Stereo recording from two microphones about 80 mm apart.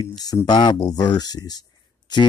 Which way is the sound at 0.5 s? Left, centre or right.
Left.